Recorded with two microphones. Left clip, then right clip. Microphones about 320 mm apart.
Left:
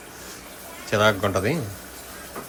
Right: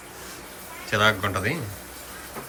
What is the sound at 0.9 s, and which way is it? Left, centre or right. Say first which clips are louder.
Speech: left 1 dB; centre.